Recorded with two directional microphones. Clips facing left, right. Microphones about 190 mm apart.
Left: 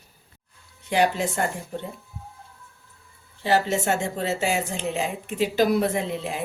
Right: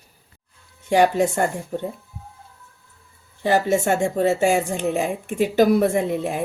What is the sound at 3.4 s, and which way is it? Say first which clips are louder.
A woman's voice: right 4 dB; 50° right (ahead or behind).